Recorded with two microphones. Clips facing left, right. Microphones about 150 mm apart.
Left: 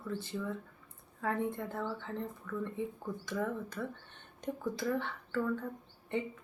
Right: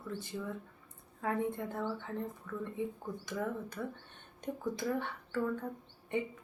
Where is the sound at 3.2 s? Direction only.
15° right (ahead or behind).